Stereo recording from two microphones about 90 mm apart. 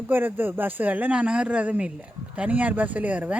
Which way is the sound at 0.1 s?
20° right (ahead or behind).